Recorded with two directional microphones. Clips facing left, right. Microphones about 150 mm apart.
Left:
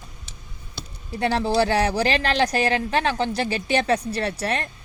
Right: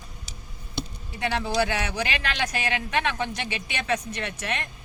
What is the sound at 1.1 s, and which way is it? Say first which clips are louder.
Speech: left 5 dB; 35° left (ahead or behind).